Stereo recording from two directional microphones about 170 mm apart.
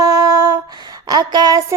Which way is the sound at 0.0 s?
20° right (ahead or behind).